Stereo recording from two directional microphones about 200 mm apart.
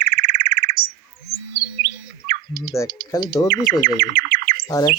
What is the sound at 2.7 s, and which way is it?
Speech, 15° left (ahead or behind).